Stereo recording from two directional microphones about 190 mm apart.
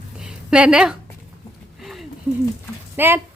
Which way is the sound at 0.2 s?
5° right (ahead or behind).